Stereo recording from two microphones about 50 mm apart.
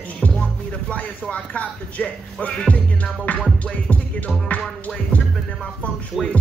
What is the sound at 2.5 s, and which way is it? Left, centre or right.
Music, centre.